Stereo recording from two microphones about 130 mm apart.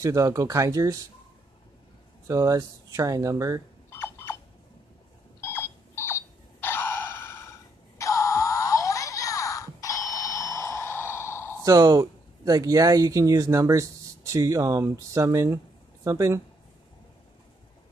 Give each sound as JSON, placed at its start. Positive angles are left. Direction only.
{"t": 0.0, "sound": "speech", "side_deg": -25}
{"t": 2.2, "sound": "speech", "side_deg": -25}
{"t": 3.9, "sound": "a sound", "side_deg": 20}
{"t": 5.4, "sound": "alarm clock", "side_deg": 20}
{"t": 8.0, "sound": "music", "side_deg": 25}
{"t": 11.6, "sound": "speech", "side_deg": -30}